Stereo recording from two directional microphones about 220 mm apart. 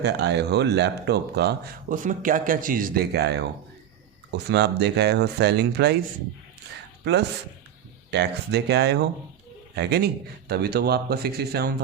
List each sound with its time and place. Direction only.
0.0 s speech: 50° right (ahead or behind)
7.0 s speech: 50° right (ahead or behind)